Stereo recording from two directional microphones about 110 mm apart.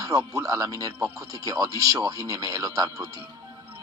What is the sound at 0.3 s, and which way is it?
Speech, 30° right (ahead or behind).